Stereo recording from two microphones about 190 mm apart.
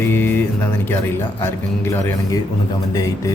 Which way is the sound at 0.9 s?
10° left (ahead or behind).